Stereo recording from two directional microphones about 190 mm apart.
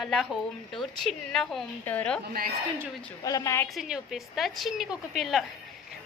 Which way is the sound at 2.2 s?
50° right (ahead or behind).